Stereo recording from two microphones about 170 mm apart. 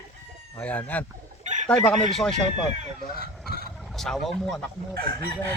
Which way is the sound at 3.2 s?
60° right (ahead or behind).